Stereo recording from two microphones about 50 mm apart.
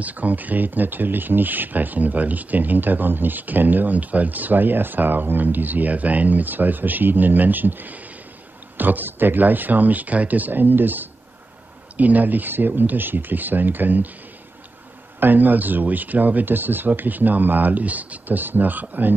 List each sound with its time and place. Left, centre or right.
0.0 s speech: right
15.1 s speech: right